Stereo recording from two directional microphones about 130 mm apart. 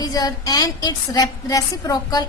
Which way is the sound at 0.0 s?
30° left (ahead or behind).